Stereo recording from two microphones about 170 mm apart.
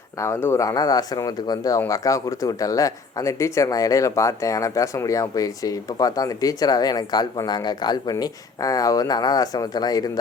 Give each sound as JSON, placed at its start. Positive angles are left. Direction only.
{"t": 0.2, "sound": "speech", "side_deg": 15}